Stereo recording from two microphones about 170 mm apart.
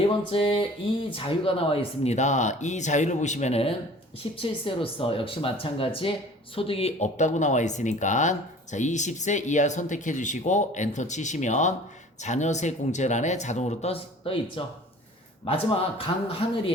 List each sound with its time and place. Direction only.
0.3 s speech: 30° left (ahead or behind)